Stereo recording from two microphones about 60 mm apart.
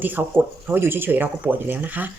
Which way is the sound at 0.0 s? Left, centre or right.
Right.